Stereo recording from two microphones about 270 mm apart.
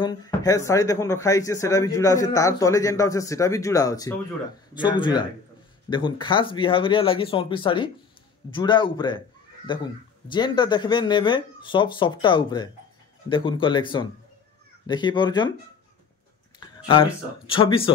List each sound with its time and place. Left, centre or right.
0.0 s speech: centre
16.5 s a sound: centre
17.5 s speech: centre